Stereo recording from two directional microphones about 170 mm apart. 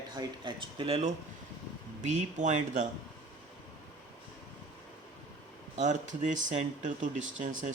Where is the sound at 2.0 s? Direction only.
45° right (ahead or behind).